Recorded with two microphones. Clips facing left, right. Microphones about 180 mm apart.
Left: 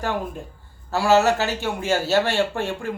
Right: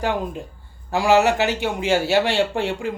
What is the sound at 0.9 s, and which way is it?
Speech, 15° right (ahead or behind).